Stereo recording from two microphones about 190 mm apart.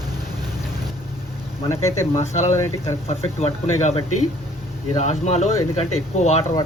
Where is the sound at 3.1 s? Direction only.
35° left (ahead or behind).